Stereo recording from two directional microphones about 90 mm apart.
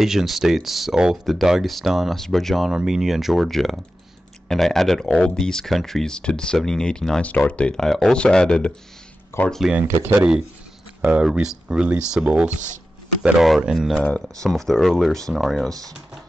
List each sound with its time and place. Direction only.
0.0 s speech: centre (ahead or behind)
9.3 s speech: 30° left (ahead or behind)
10.1 s speech: 10° right (ahead or behind)
14.0 s speech: 15° left (ahead or behind)
14.5 s speech: 5° left (ahead or behind)